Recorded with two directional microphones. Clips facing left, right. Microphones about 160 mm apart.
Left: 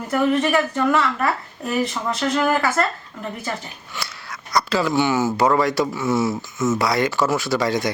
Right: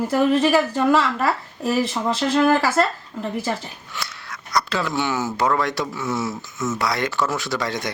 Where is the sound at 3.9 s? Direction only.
Centre (ahead or behind).